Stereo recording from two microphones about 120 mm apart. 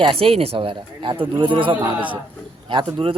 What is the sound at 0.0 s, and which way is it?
Speech, 50° right (ahead or behind).